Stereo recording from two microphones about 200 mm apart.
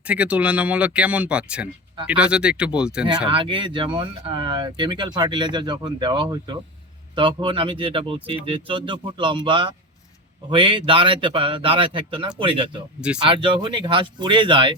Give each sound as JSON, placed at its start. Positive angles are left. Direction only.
{"t": 0.0, "sound": "speech", "side_deg": -5}
{"t": 3.2, "sound": "speech", "side_deg": -25}